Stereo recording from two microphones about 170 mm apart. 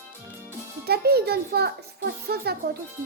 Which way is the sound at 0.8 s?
70° right (ahead or behind).